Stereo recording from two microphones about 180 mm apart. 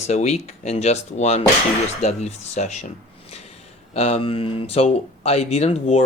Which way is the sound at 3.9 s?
35° left (ahead or behind).